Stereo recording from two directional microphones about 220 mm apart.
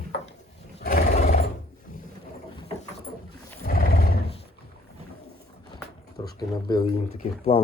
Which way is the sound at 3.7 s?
45° left (ahead or behind).